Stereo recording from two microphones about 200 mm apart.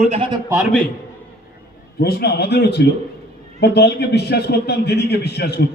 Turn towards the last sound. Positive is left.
turn(degrees=55)  # may be behind; listen again after turning